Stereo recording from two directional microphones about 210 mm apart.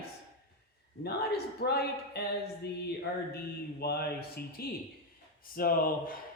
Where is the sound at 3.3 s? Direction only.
50° left (ahead or behind).